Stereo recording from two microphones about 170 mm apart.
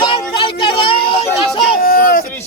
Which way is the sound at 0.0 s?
30° left (ahead or behind).